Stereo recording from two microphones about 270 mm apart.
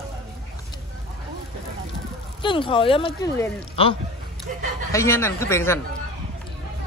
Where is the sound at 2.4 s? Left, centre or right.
Centre.